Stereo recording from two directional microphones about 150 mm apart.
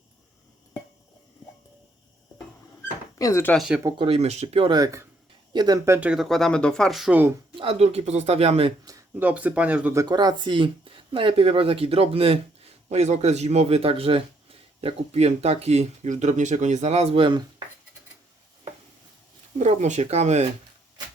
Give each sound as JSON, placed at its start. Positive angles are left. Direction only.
{"t": 3.2, "sound": "speech", "side_deg": 25}
{"t": 3.8, "sound": "speech", "side_deg": -35}
{"t": 4.7, "sound": "speech", "side_deg": -20}
{"t": 7.5, "sound": "speech", "side_deg": -40}
{"t": 8.8, "sound": "speech", "side_deg": -20}
{"t": 10.0, "sound": "speech", "side_deg": -25}
{"t": 19.5, "sound": "speech", "side_deg": -50}